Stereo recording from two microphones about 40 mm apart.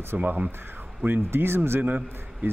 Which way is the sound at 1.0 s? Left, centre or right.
Right.